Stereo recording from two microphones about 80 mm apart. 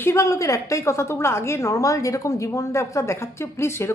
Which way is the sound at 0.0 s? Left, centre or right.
Left.